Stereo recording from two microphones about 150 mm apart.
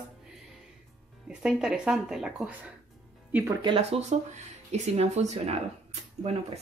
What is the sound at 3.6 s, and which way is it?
Speech, 35° right (ahead or behind).